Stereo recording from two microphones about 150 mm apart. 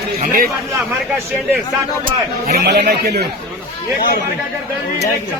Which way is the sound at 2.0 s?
80° right.